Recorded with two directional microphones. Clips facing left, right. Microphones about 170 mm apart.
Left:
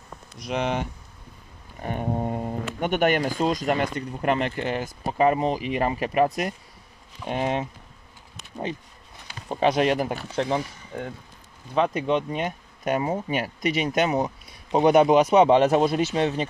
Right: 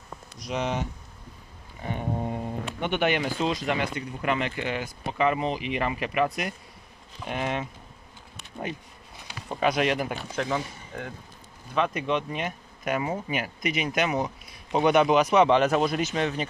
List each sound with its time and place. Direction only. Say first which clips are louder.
0.4 s speech: left 3 dB; 60° left (ahead or behind)
1.9 s speech: left 3 dB; 45° left (ahead or behind)
9.5 s speech: left 3 dB; 30° left (ahead or behind)